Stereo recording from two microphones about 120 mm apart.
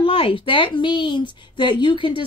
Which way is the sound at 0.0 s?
50° left (ahead or behind).